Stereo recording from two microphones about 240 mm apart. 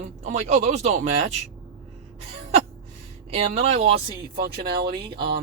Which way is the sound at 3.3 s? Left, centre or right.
Right.